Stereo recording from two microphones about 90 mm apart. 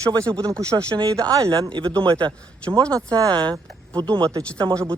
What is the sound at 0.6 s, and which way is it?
A man's voice, 35° right (ahead or behind).